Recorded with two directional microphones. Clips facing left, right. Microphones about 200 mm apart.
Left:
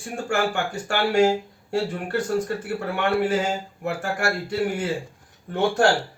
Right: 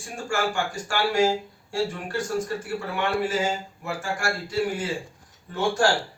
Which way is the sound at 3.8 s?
60° left (ahead or behind).